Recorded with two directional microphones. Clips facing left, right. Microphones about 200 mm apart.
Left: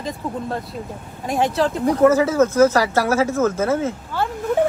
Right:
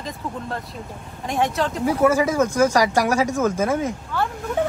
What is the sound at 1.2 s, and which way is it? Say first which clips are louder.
Speech: left 2 dB; centre (ahead or behind).